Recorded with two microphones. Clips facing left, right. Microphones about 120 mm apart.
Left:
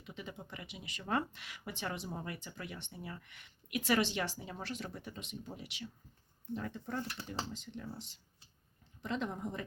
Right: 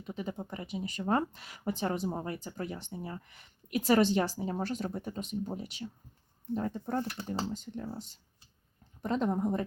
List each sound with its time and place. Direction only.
0.0 s speech: 40° right (ahead or behind)